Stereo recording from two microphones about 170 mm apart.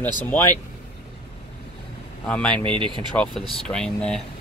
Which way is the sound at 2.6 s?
30° right (ahead or behind).